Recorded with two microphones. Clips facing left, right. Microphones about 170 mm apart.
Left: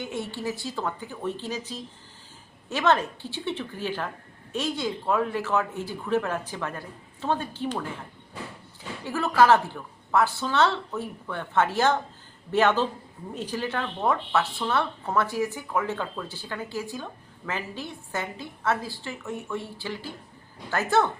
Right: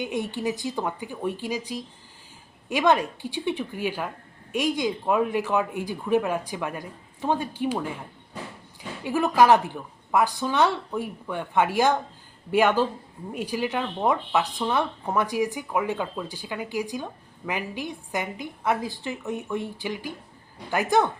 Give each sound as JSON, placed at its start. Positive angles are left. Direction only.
{"t": 0.0, "sound": "speech", "side_deg": -15}
{"t": 9.0, "sound": "speech", "side_deg": -15}